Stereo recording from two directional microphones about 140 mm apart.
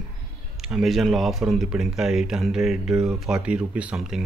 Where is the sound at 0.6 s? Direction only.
5° right (ahead or behind).